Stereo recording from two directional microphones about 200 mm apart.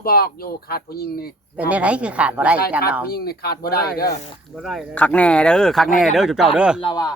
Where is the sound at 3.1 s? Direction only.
50° left (ahead or behind).